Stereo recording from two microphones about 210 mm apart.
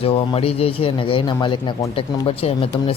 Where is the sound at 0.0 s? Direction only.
25° left (ahead or behind).